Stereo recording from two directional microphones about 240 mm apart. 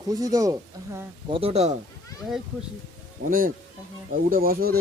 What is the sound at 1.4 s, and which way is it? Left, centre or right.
Speech, right.